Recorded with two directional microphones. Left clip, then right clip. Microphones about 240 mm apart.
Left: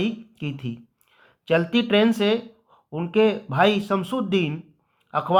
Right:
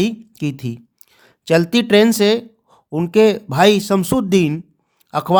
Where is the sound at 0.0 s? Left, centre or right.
Right.